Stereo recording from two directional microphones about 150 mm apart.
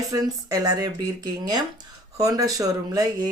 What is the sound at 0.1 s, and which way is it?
Speech, 25° right (ahead or behind).